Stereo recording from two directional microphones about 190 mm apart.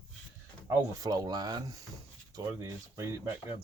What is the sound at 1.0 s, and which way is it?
Speech, 20° right (ahead or behind).